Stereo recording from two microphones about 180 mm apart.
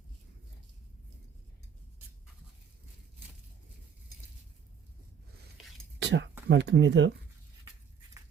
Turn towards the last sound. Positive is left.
turn(degrees=-85)